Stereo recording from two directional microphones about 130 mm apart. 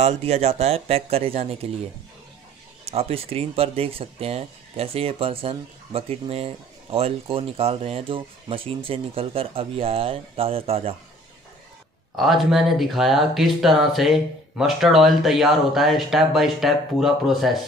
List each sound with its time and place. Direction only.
0.0 s speech: 55° right (ahead or behind)
2.8 s speech: 50° right (ahead or behind)
12.2 s speech: centre (ahead or behind)